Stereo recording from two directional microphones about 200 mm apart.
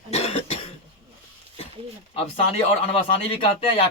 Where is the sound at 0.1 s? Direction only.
30° left (ahead or behind).